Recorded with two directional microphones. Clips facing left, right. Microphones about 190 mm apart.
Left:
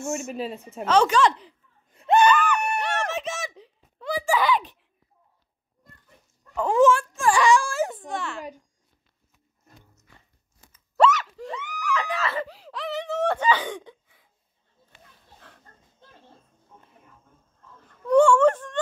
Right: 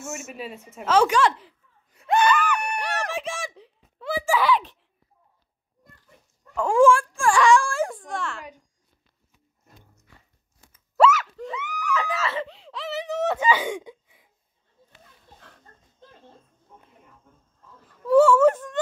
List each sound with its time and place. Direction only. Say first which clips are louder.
0.0 s speech: left 6 dB; 5° right (ahead or behind)
0.3 s a woman's voice: left 5 dB; 30° left (ahead or behind)
0.8 s a woman's voice: even; 10° right (ahead or behind)
1.9 s a sound: left 3 dB; 25° left (ahead or behind)
2.2 s a sound: left 2 dB; 10° right (ahead or behind)
6.5 s speech: right 1 dB; 5° left (ahead or behind)
7.2 s wail: right 1 dB; centre (ahead or behind)
8.1 s speech: even; centre (ahead or behind)
11.0 s screaming: right 1 dB; 5° right (ahead or behind)
15.4 s a sound: left 2 dB; centre (ahead or behind)
17.8 s whimper: right 1 dB; 5° right (ahead or behind)